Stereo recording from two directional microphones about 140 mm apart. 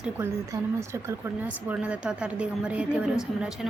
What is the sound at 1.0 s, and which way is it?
A woman's voice, 10° right (ahead or behind).